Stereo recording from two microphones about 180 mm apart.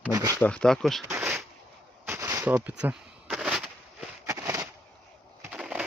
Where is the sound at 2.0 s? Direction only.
15° right (ahead or behind).